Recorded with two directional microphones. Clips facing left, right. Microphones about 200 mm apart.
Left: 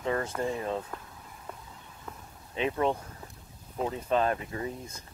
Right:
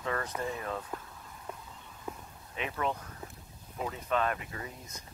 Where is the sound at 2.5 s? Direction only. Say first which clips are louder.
Left 6 dB; 30° left (ahead or behind).